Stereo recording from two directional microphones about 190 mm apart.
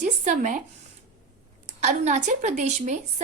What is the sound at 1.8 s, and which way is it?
A woman's voice, 40° right (ahead or behind).